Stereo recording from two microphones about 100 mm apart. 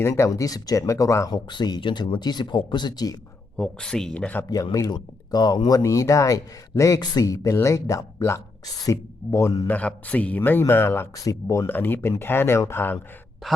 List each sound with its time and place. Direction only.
0.0 s speech: 30° left (ahead or behind)
0.3 s speech: 40° left (ahead or behind)
1.3 s speech: 50° left (ahead or behind)
3.6 s speech: 10° left (ahead or behind)
4.4 s speech: 40° left (ahead or behind)
9.6 s speech: 15° left (ahead or behind); by 11.7 s 30° left (ahead or behind)
11.7 s speech: 20° left (ahead or behind)